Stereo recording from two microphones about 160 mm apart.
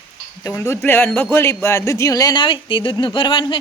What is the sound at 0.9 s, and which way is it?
A man's voice, 15° left (ahead or behind).